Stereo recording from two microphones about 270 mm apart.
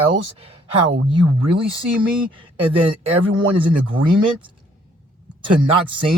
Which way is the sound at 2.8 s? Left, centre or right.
Centre.